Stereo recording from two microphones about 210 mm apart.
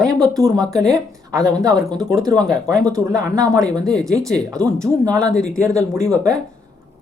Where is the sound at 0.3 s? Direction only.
15° right (ahead or behind).